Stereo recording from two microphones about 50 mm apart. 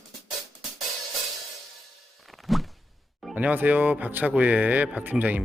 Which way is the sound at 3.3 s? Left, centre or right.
Right.